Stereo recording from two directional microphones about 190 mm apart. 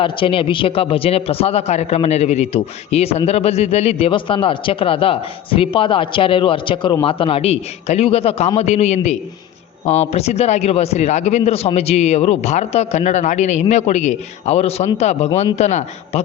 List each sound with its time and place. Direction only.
0.0 s a man's voice: 30° left (ahead or behind)